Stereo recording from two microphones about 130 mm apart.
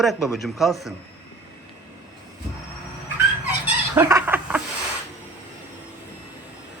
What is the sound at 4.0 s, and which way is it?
Chicken, 20° right (ahead or behind).